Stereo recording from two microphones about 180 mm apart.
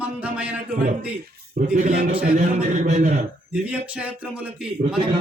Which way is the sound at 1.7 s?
40° right (ahead or behind).